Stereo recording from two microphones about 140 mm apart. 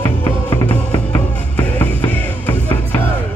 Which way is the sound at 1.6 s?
15° left (ahead or behind).